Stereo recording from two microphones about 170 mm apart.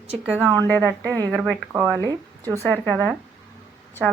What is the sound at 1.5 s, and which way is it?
Speech, 10° right (ahead or behind).